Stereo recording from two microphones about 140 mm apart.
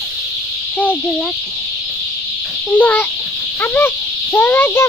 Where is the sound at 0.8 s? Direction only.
10° left (ahead or behind).